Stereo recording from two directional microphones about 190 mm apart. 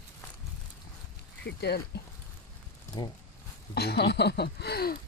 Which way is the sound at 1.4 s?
60° left (ahead or behind).